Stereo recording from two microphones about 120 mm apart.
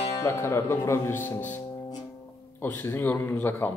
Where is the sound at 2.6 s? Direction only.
15° left (ahead or behind).